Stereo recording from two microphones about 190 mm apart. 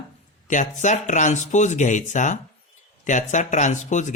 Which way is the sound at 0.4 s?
40° left (ahead or behind).